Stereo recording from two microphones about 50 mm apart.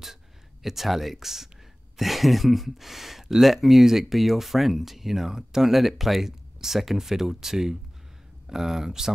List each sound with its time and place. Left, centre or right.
0.0 s speech: centre